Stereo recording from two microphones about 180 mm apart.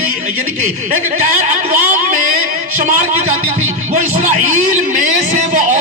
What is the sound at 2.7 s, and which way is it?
Speech, 45° right (ahead or behind).